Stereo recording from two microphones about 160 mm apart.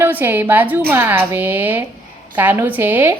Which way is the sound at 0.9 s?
15° right (ahead or behind).